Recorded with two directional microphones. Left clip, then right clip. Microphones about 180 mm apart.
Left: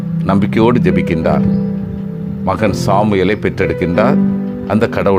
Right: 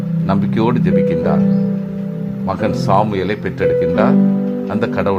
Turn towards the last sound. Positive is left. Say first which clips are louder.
# left 4 dB
turn(degrees=35)  # may be behind; listen again after turning